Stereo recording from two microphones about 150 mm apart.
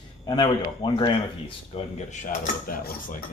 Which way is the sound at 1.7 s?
50° left (ahead or behind).